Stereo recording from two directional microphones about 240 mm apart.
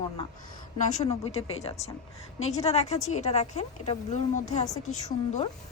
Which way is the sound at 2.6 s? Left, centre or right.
Left.